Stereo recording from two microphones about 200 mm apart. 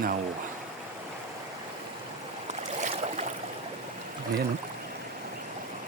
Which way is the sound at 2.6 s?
35° right (ahead or behind).